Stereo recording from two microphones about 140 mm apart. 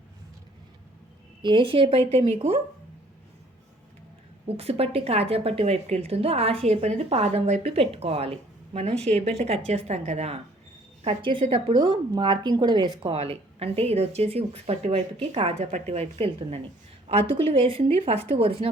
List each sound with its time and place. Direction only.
1.4 s a woman's voice: 35° right (ahead or behind)
4.4 s a woman's voice: 45° right (ahead or behind)